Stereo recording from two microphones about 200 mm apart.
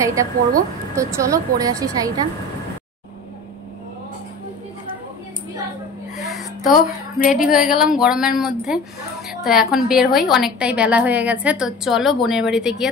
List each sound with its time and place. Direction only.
0.0 s a woman's voice: 15° right (ahead or behind)
6.1 s music: centre (ahead or behind)
6.6 s speech: 40° left (ahead or behind)
7.5 s a woman's voice: centre (ahead or behind)